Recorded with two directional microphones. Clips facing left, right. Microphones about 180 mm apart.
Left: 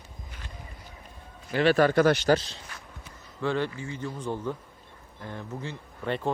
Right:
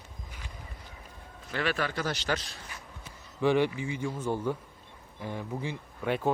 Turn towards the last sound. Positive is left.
turn(degrees=-5)  # may be behind; listen again after turning